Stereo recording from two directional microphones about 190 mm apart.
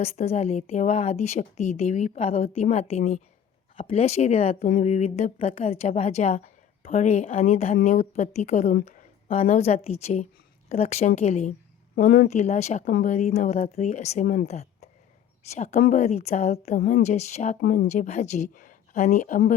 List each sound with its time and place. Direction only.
0.0 s a woman's voice: 35° left (ahead or behind)
14.5 s a sound: 35° left (ahead or behind)
15.5 s a woman's voice: 35° left (ahead or behind)
17.6 s speech: 55° left (ahead or behind)
17.8 s a woman's voice: 35° left (ahead or behind)